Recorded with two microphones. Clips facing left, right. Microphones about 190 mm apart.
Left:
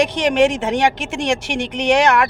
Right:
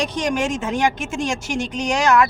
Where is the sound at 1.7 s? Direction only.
60° left (ahead or behind).